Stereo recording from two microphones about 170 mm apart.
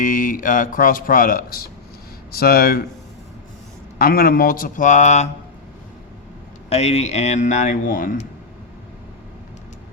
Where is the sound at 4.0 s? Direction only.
60° left (ahead or behind); by 5.2 s 45° left (ahead or behind).